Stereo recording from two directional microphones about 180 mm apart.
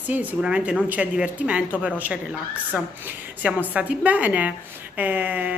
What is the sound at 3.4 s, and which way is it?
A woman's voice, 10° right (ahead or behind).